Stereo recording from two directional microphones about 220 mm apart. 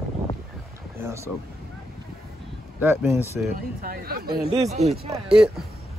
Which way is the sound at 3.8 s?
45° right (ahead or behind).